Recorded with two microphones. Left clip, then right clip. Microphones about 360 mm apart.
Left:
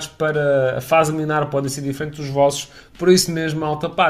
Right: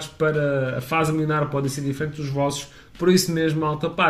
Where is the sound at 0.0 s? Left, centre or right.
Centre.